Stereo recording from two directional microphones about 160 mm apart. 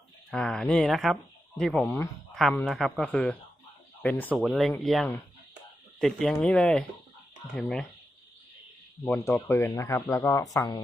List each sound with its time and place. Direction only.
0.3 s speech: 5° left (ahead or behind)
9.0 s speech: 10° left (ahead or behind)